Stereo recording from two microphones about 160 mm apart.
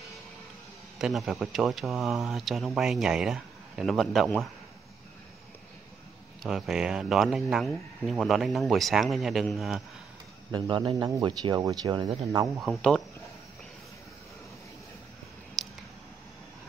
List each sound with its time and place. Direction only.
0.9 s speech: centre (ahead or behind)
6.4 s speech: centre (ahead or behind)
10.5 s speech: 25° right (ahead or behind)
12.5 s speech: 5° left (ahead or behind)
15.6 s squish: centre (ahead or behind)